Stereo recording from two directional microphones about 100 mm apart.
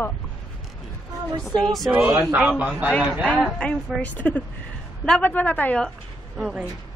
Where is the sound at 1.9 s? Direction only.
15° right (ahead or behind).